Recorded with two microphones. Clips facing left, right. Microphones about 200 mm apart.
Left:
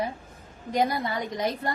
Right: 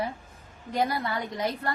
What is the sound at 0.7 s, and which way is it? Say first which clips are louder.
Speech: left 2 dB; 20° left (ahead or behind).